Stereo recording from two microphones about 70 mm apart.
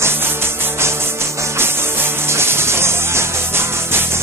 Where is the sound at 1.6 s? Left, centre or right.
Right.